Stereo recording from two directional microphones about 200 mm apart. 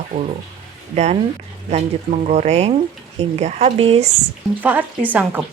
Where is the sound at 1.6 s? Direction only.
35° right (ahead or behind).